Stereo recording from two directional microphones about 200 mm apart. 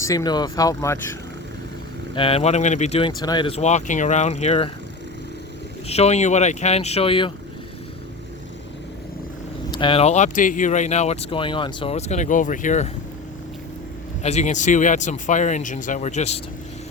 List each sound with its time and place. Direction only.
0.0 s speech: 15° left (ahead or behind)
2.1 s speech: 30° left (ahead or behind)
3.2 s speech: 20° left (ahead or behind)
5.9 s speech: 30° left (ahead or behind)
9.7 s speech: 25° left (ahead or behind)
14.2 s speech: 35° left (ahead or behind)